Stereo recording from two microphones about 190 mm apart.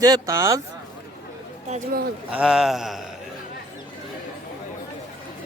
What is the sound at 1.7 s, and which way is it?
Speech, 40° right (ahead or behind).